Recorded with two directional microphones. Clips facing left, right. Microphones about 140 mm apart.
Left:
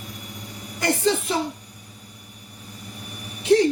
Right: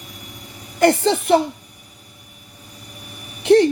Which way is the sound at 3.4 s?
65° right (ahead or behind).